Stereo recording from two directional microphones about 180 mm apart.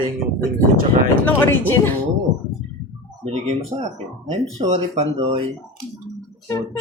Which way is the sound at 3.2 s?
35° right (ahead or behind).